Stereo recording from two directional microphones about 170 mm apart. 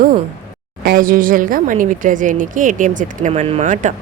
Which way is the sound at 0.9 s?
55° right (ahead or behind).